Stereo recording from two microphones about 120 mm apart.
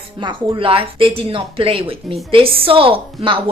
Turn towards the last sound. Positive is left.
turn(degrees=-50)  # may be behind; listen again after turning